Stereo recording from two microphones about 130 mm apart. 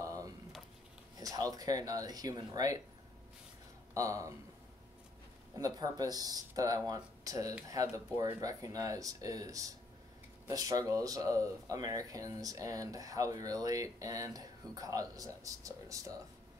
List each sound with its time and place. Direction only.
0.0 s a sound: 25° right (ahead or behind)
1.2 s speech: 30° right (ahead or behind)
3.9 s speech: 25° right (ahead or behind)
5.6 s speech: 30° right (ahead or behind)